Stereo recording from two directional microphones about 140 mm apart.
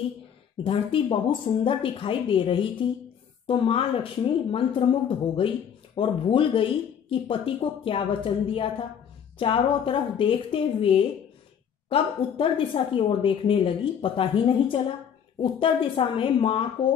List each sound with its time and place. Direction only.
0.7 s a woman's voice: 40° left (ahead or behind)